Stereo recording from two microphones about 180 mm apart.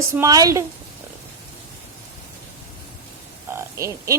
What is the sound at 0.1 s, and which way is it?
Speech, 20° right (ahead or behind).